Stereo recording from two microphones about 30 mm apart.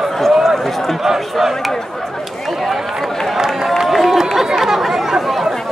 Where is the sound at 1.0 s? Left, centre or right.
Centre.